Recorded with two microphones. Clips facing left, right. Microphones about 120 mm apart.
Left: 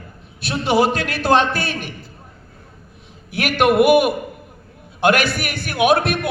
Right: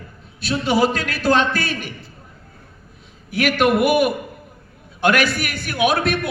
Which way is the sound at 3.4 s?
50° left (ahead or behind).